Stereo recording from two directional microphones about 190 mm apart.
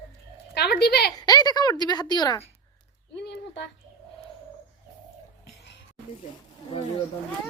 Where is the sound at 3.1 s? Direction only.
65° left (ahead or behind).